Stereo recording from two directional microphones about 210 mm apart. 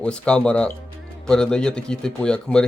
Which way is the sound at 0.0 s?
5° left (ahead or behind).